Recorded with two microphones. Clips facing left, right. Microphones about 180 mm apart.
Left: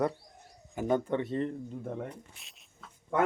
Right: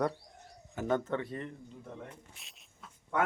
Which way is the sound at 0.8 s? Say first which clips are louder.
Left 3 dB; 15° left (ahead or behind).